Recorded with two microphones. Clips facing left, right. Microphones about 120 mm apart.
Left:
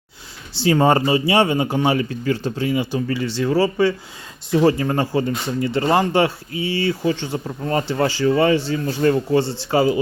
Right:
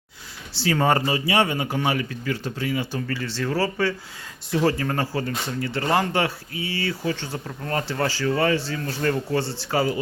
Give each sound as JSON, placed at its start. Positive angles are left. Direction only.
{"t": 0.5, "sound": "speech", "side_deg": 25}